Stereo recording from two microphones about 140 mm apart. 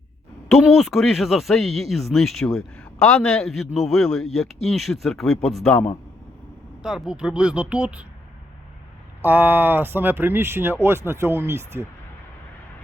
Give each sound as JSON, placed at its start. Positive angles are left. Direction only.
{"t": 0.4, "sound": "speech", "side_deg": 0}
{"t": 9.2, "sound": "speech", "side_deg": -15}